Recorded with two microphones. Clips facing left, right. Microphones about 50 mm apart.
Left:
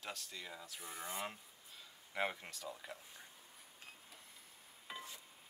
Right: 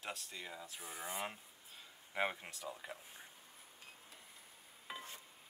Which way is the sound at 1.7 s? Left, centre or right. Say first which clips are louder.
Right 1 dB; centre.